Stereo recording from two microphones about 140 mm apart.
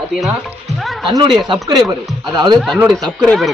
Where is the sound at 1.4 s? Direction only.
25° right (ahead or behind).